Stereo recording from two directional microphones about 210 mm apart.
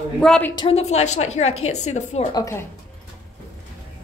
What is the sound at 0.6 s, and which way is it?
A woman's voice, 30° left (ahead or behind).